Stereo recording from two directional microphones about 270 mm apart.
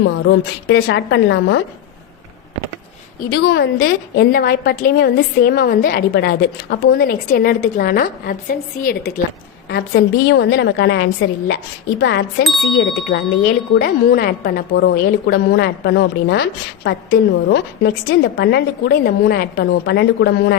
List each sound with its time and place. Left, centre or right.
0.0 s a woman's voice: left
3.2 s a woman's voice: left